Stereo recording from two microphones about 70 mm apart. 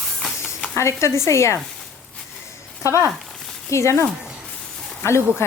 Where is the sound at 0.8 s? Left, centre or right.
Left.